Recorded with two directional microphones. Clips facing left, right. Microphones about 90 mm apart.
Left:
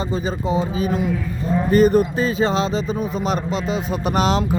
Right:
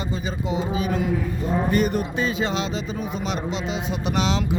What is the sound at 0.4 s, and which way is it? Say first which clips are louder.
Speech: left 2 dB; 35° left (ahead or behind).